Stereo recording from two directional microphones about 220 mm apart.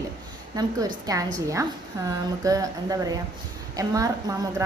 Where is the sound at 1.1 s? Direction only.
15° right (ahead or behind).